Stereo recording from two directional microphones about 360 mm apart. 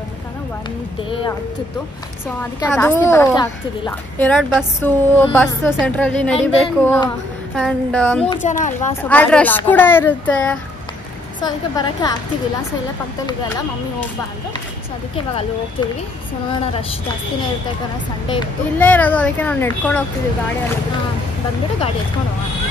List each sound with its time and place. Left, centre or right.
2.7 s a woman's voice: centre
8.4 s speech: left
9.0 s a woman's voice: centre
18.3 s a woman's voice: centre